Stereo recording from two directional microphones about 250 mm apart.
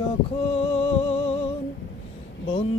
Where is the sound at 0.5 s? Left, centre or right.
Left.